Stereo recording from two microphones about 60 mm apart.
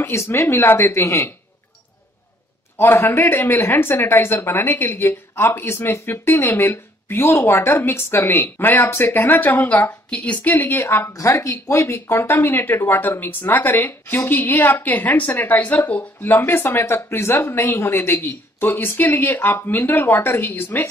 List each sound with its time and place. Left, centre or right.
0.0 s speech: left
2.8 s speech: left
11.1 s speech: left
16.2 s speech: left